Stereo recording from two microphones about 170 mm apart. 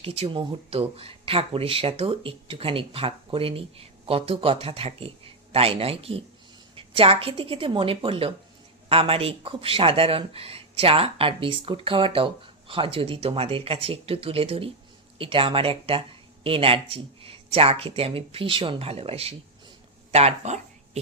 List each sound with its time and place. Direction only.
0.0 s speech: 35° right (ahead or behind)
20.1 s dog: 40° right (ahead or behind)